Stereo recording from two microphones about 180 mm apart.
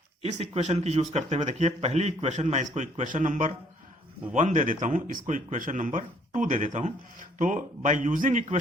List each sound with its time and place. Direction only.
0.2 s a man's voice: 35° right (ahead or behind)